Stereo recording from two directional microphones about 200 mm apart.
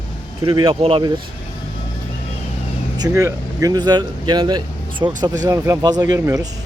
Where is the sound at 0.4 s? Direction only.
25° right (ahead or behind).